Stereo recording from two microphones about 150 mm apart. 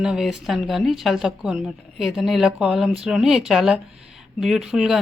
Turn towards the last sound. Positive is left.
turn(degrees=-5)  # may be behind; listen again after turning